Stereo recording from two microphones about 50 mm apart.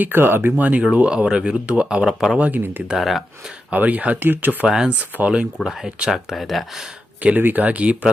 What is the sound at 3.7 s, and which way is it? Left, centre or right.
Speech, right.